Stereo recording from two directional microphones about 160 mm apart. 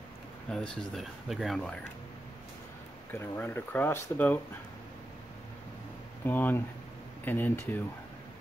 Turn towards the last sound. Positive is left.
turn(degrees=10)  # may be behind; listen again after turning